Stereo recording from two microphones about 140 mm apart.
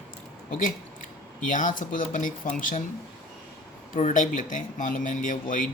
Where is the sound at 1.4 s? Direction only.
70° left (ahead or behind).